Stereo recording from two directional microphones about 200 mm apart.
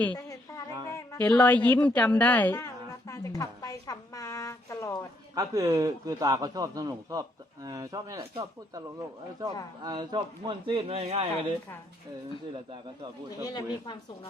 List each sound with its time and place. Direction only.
0.0 s music: 10° left (ahead or behind)
0.9 s a woman's voice: 15° left (ahead or behind)
3.1 s a sound: 15° left (ahead or behind)
5.3 s a man's voice: 15° right (ahead or behind)
13.4 s speech: 20° left (ahead or behind)